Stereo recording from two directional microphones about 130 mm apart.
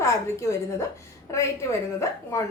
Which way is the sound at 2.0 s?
20° left (ahead or behind).